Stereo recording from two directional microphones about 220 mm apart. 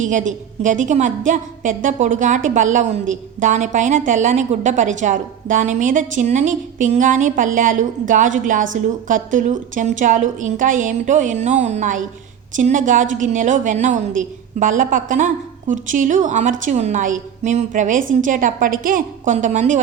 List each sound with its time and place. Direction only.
0.0 s a woman's voice: 35° right (ahead or behind)